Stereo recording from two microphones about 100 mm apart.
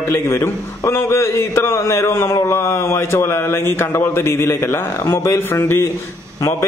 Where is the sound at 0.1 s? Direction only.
25° left (ahead or behind).